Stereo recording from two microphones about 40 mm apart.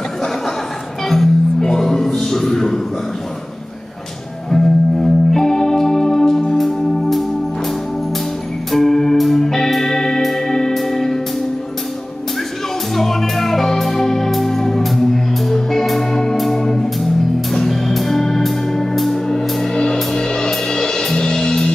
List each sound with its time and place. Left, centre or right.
1.0 s music: centre
1.7 s a sound: centre
4.5 s music: centre
8.7 s music: centre
12.9 s music: centre